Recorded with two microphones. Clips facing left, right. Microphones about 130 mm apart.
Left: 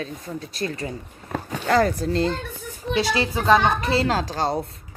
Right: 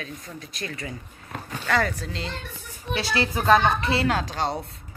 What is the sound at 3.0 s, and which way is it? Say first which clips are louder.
Speech: left 3 dB; 15° left (ahead or behind).